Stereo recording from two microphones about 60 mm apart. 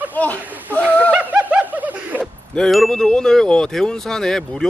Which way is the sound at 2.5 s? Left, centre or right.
Centre.